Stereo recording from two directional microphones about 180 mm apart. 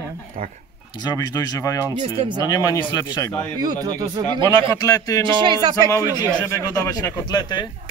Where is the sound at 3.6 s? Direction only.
20° right (ahead or behind).